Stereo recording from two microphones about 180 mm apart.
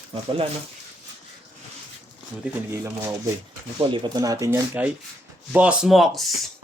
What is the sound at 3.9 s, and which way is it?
Speech, 25° right (ahead or behind).